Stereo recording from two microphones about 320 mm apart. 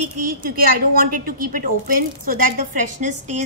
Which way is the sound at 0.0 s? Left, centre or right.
Right.